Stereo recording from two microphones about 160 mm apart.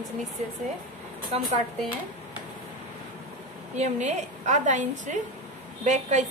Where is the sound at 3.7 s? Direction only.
45° right (ahead or behind).